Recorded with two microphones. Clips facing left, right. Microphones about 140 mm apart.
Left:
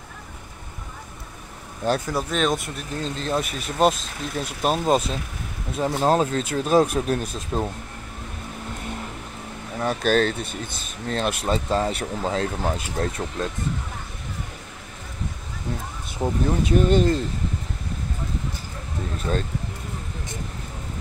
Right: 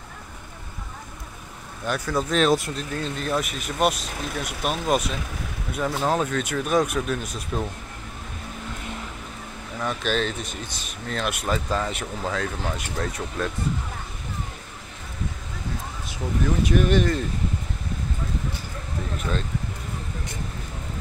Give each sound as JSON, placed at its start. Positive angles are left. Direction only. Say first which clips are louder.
{"t": 1.9, "sound": "speech", "louder": "left 4 dB", "side_deg": 25}
{"t": 2.1, "sound": "speech", "louder": "right 3 dB", "side_deg": 0}
{"t": 3.0, "sound": "speech", "louder": "left 2 dB", "side_deg": 30}
{"t": 9.8, "sound": "speech", "louder": "left 5 dB", "side_deg": 40}
{"t": 11.1, "sound": "speech", "louder": "left 3 dB", "side_deg": 35}
{"t": 16.2, "sound": "speech", "louder": "left 2 dB", "side_deg": 30}